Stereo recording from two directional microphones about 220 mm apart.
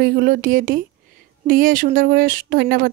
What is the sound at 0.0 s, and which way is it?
Speech, 40° right (ahead or behind).